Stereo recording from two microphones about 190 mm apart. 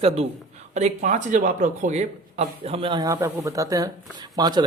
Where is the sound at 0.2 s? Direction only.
35° right (ahead or behind).